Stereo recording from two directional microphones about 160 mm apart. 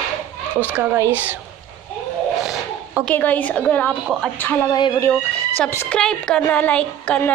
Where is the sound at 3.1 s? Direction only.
10° left (ahead or behind).